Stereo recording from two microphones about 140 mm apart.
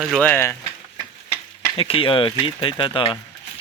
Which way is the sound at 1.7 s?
40° left (ahead or behind).